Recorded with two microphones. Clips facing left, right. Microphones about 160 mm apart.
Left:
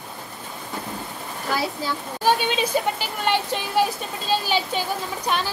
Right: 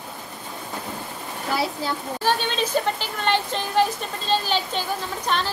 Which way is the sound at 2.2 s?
10° left (ahead or behind).